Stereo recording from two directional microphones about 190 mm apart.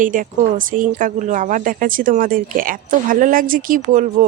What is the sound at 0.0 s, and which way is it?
Speech, 45° right (ahead or behind).